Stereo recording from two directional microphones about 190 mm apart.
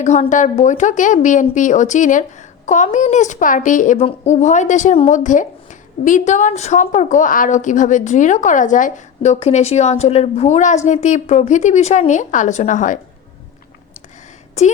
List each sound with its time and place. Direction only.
0.0 s a woman's voice: 40° left (ahead or behind)
14.6 s a woman's voice: 35° left (ahead or behind)